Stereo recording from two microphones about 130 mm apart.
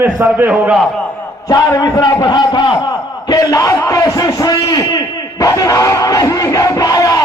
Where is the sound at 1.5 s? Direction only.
30° left (ahead or behind).